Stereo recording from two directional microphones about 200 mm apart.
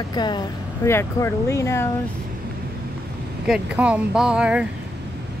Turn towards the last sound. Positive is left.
turn(degrees=-5)  # may be behind; listen again after turning